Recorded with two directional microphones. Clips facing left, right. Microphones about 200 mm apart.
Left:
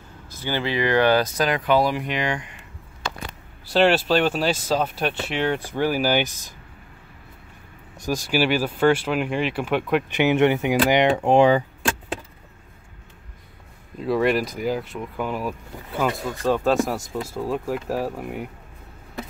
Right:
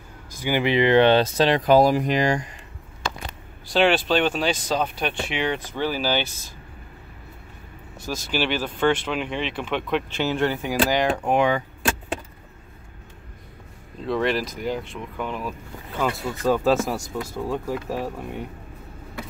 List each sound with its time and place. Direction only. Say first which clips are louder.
0.3 s speech: right 4 dB; 15° right (ahead or behind); by 2.5 s 40° right (ahead or behind)
3.7 s speech: left 1 dB; 5° left (ahead or behind)
8.0 s speech: left 4 dB; 10° left (ahead or behind)
10.2 s speech: left 8 dB; 20° left (ahead or behind)
14.0 s speech: left 3 dB; 5° left (ahead or behind)
16.9 s speech: left 1 dB; 20° left (ahead or behind)
17.3 s speech: left 1 dB; 5° left (ahead or behind)